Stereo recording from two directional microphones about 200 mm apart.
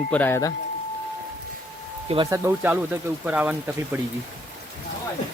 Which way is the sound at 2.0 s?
25° right (ahead or behind).